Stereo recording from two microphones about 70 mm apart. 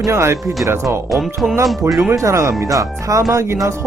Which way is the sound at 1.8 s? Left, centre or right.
Right.